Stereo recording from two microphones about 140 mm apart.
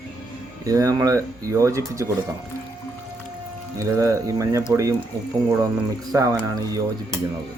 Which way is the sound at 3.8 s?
20° right (ahead or behind).